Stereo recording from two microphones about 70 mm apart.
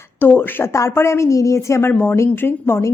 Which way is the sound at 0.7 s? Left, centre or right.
Left.